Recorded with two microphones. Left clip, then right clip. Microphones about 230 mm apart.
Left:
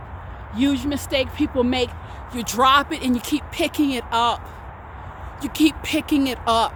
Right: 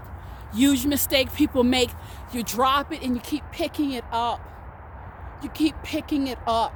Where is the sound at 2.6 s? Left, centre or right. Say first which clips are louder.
Left 6 dB; centre.